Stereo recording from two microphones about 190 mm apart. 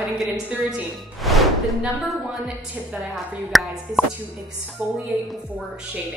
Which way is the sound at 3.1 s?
Centre (ahead or behind).